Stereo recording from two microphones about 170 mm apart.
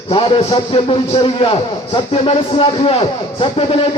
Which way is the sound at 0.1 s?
35° left (ahead or behind).